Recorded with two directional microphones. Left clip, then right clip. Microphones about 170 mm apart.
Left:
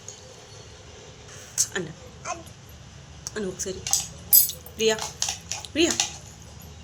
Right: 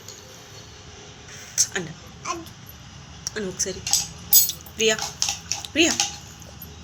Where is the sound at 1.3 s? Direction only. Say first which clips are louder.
Right 3 dB; 30° left (ahead or behind).